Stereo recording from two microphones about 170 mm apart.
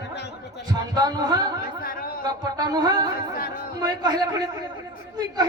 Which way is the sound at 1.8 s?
60° left (ahead or behind).